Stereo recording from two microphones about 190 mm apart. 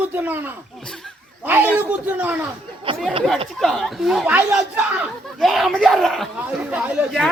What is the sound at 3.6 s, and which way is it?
A woman's voice, centre (ahead or behind).